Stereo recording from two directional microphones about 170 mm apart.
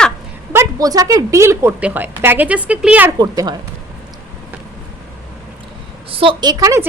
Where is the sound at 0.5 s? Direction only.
20° right (ahead or behind).